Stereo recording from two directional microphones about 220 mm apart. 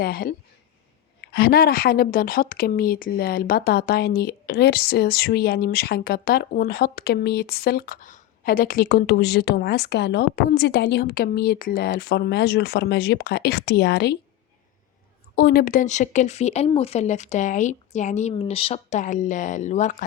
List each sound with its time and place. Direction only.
0.0 s speech: 40° left (ahead or behind)
15.4 s speech: 45° left (ahead or behind)